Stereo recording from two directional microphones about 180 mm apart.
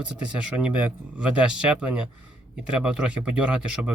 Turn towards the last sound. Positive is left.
turn(degrees=-5)  # may be behind; listen again after turning